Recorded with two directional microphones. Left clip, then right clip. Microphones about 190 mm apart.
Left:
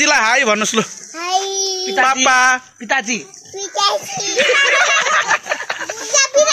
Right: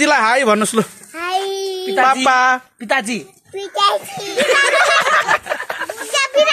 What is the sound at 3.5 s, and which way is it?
Children playing, 5° left (ahead or behind).